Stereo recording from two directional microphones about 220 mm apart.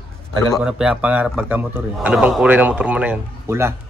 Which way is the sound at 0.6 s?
5° right (ahead or behind).